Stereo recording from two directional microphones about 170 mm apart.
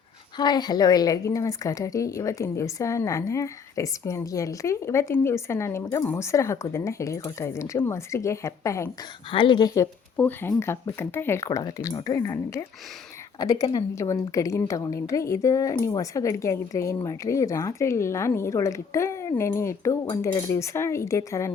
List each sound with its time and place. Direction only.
0.3 s a woman's voice: 25° left (ahead or behind)
9.3 s a woman's voice: 30° left (ahead or behind)